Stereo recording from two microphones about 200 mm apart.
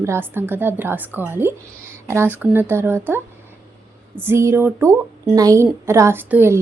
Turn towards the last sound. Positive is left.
turn(degrees=-10)  # may be behind; listen again after turning